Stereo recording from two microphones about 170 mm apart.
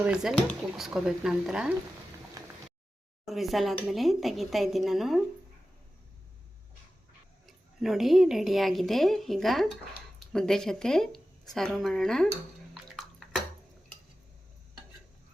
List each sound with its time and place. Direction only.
0.0 s speech: 5° right (ahead or behind)
2.4 s a sound: 20° right (ahead or behind)
3.2 s speech: centre (ahead or behind)
7.4 s speech: centre (ahead or behind)
12.7 s bathtub: centre (ahead or behind)